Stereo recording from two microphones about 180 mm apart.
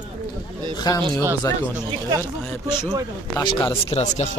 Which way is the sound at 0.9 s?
20° left (ahead or behind).